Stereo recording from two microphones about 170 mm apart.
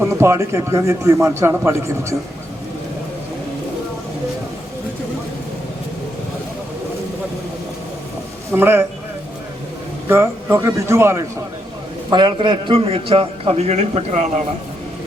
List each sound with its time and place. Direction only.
0.0 s speech: 15° right (ahead or behind)
8.5 s speech: 15° right (ahead or behind)
10.1 s speech: 15° right (ahead or behind)
12.1 s a man's voice: 30° right (ahead or behind); by 14.4 s 45° right (ahead or behind)